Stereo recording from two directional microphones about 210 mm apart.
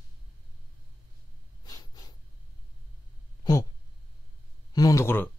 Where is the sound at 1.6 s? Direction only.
20° left (ahead or behind).